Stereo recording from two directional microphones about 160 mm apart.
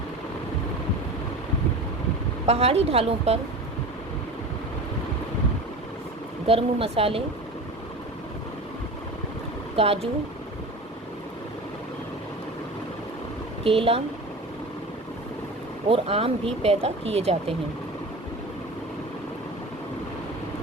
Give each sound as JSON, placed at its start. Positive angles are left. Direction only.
{"t": 2.5, "sound": "speech", "side_deg": -40}
{"t": 6.5, "sound": "speech", "side_deg": -35}
{"t": 9.7, "sound": "speech", "side_deg": -40}
{"t": 13.7, "sound": "speech", "side_deg": -35}
{"t": 15.9, "sound": "speech", "side_deg": -35}